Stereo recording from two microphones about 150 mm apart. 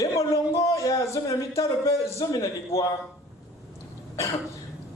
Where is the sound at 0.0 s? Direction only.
20° left (ahead or behind).